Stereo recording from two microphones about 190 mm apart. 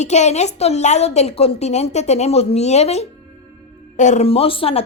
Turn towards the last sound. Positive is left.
turn(degrees=30)  # may be behind; listen again after turning